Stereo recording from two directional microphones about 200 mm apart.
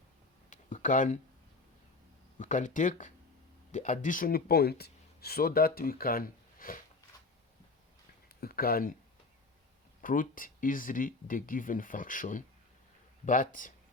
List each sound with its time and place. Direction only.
0.5 s a sound: 40° left (ahead or behind)
2.4 s speech: 40° left (ahead or behind)
8.4 s speech: 50° left (ahead or behind)
10.0 s speech: 45° left (ahead or behind)